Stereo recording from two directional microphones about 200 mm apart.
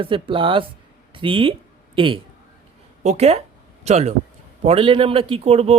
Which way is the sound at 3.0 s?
30° right (ahead or behind).